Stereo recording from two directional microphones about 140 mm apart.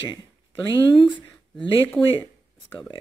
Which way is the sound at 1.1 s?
10° left (ahead or behind).